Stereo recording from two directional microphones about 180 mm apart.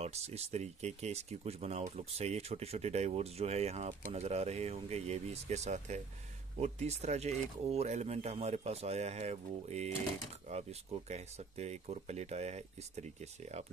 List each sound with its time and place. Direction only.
0.0 s speech: 35° right (ahead or behind)